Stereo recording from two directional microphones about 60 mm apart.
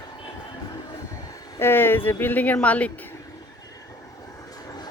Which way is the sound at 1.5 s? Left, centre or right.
Left.